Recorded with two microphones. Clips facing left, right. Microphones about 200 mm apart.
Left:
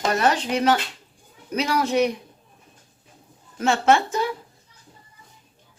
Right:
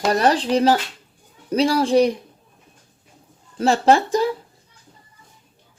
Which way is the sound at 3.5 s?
35° right (ahead or behind).